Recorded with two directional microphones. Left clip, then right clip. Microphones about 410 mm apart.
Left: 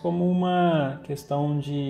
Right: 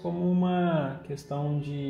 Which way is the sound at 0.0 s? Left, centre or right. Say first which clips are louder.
Left 5 dB; centre.